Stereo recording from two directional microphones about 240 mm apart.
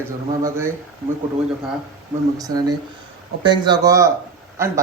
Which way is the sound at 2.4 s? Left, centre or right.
Centre.